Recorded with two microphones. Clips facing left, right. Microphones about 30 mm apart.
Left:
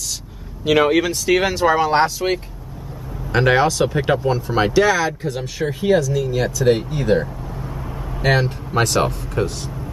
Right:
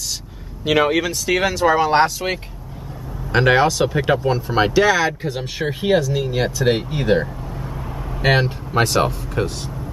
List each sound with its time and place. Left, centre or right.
0.7 s speech: centre
2.2 s speech: centre
5.4 s speech: right
7.6 s vehicle: centre
8.2 s speech: centre
8.5 s speech: centre